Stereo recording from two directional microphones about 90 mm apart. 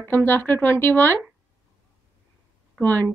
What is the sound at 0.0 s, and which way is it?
Speech, 25° left (ahead or behind).